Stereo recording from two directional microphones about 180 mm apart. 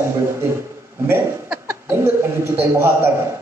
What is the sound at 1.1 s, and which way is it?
Chuckle, 10° right (ahead or behind).